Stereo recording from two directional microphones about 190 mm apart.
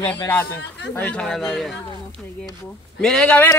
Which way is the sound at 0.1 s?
10° left (ahead or behind).